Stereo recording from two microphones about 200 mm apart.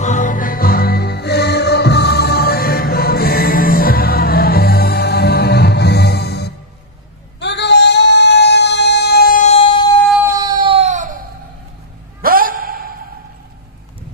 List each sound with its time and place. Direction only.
0.0 s music: 40° left (ahead or behind); by 6.5 s 55° left (ahead or behind)
7.3 s singing: 60° left (ahead or behind); by 9.8 s 30° left (ahead or behind)
10.3 s baby cry: 20° right (ahead or behind); by 11.1 s 35° right (ahead or behind)
12.2 s a sound: 45° right (ahead or behind)